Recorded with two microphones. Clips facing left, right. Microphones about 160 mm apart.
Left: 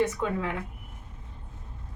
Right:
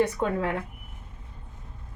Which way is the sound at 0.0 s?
40° right (ahead or behind).